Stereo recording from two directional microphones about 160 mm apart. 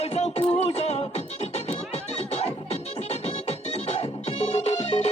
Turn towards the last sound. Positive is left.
turn(degrees=40)  # may be behind; listen again after turning